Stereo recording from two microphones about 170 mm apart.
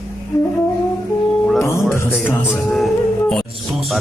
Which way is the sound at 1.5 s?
15° left (ahead or behind).